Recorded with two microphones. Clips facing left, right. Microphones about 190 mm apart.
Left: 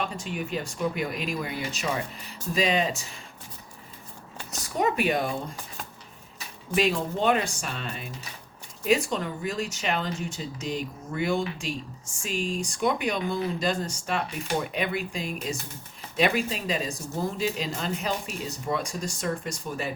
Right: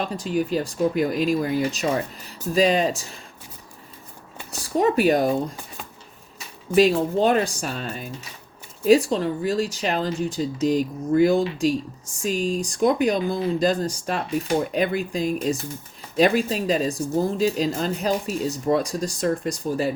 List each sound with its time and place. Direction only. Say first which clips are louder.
0.0 s speech: right 7 dB; 35° right (ahead or behind)
4.6 s speech: right 6 dB; 35° right (ahead or behind)
6.7 s speech: right 8 dB; 35° right (ahead or behind)